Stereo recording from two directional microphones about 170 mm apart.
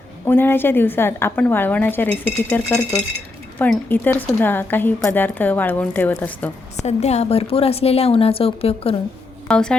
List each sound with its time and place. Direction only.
0.3 s a woman's voice: 10° left (ahead or behind)
6.8 s a woman's voice: 40° left (ahead or behind)
9.5 s speech: 5° left (ahead or behind)